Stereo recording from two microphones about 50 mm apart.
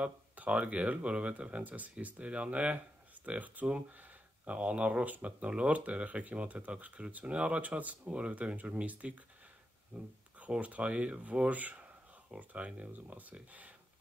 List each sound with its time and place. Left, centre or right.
0.0 s speech: right